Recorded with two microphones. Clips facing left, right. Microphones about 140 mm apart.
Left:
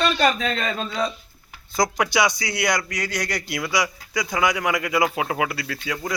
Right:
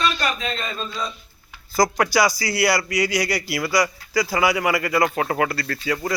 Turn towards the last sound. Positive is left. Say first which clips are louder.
# right 3 dB
turn(degrees=0)  # may be behind; listen again after turning